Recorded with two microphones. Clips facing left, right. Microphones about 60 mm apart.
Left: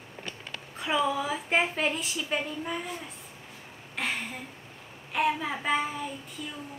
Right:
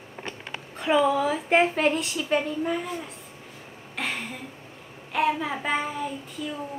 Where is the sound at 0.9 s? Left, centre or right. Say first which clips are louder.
Right 6 dB; centre.